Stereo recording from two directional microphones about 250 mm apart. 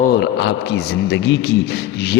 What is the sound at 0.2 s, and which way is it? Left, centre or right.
A man's voice, left.